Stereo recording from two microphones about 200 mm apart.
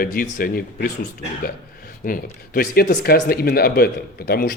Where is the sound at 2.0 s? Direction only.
45° left (ahead or behind).